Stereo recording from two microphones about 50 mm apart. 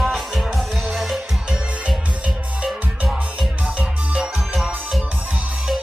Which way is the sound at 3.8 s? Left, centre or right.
Right.